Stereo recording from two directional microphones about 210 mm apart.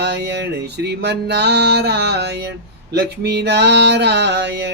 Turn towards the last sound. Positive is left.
turn(degrees=-55)  # may be behind; listen again after turning